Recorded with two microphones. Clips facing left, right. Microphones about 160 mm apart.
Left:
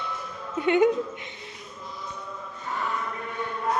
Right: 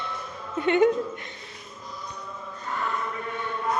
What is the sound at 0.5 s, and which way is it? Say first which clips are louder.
Speech: even; 10° left (ahead or behind).